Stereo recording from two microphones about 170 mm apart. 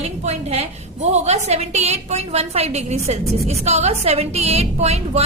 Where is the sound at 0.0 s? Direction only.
40° right (ahead or behind).